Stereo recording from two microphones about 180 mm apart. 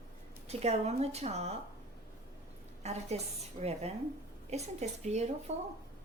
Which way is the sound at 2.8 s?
35° right (ahead or behind).